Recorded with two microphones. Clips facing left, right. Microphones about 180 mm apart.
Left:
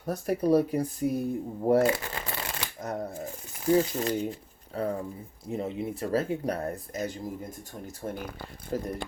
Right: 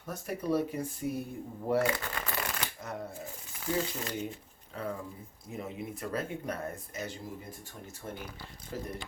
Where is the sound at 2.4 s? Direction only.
40° left (ahead or behind).